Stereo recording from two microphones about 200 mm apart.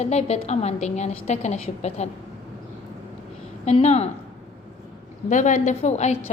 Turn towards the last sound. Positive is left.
turn(degrees=35)  # may be behind; listen again after turning